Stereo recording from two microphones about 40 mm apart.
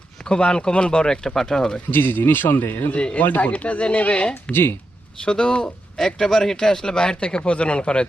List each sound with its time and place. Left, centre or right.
0.3 s speech: left
1.9 s speech: left
2.9 s speech: left